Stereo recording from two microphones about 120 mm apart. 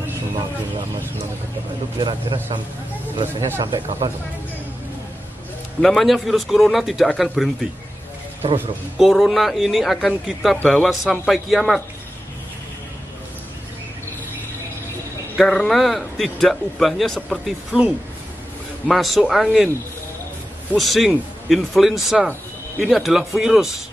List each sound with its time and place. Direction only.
2.0 s a man's voice: 45° right (ahead or behind)
3.7 s a man's voice: 50° right (ahead or behind)
5.8 s speech: centre (ahead or behind)
8.9 s speech: centre (ahead or behind)
15.3 s speech: 5° left (ahead or behind)
20.7 s speech: centre (ahead or behind)